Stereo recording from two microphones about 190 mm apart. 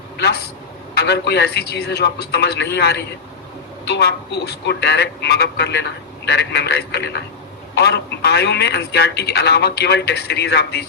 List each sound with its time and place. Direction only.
0.2 s a man's voice: 60° left (ahead or behind)